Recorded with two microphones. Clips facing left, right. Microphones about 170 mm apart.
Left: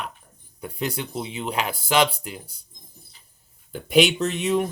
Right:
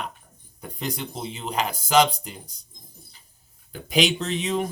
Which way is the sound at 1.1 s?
5° left (ahead or behind).